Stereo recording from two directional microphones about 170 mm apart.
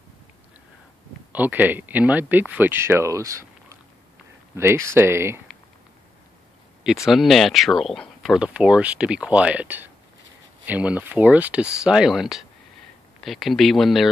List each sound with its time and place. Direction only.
1.3 s speech: 10° right (ahead or behind)
7.1 s speech: centre (ahead or behind)